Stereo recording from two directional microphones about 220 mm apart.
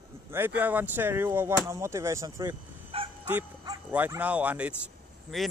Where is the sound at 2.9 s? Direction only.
25° right (ahead or behind).